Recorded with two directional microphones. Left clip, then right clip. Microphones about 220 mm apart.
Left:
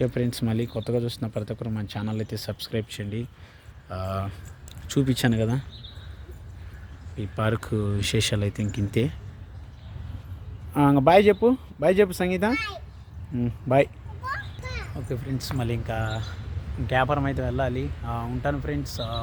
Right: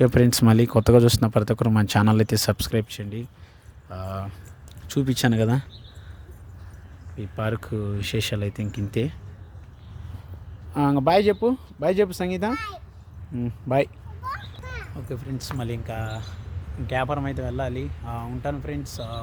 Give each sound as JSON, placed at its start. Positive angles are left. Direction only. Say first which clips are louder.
{"t": 0.0, "sound": "speech", "louder": "right 8 dB", "side_deg": -35}
{"t": 2.9, "sound": "speech", "louder": "left 1 dB", "side_deg": -5}
{"t": 4.9, "sound": "speech", "louder": "right 1 dB", "side_deg": -15}
{"t": 7.2, "sound": "speech", "louder": "left 2 dB", "side_deg": 0}
{"t": 10.8, "sound": "speech", "louder": "left 2 dB", "side_deg": -5}
{"t": 13.3, "sound": "a sound", "louder": "left 2 dB", "side_deg": -5}
{"t": 15.1, "sound": "speech", "louder": "left 2 dB", "side_deg": 0}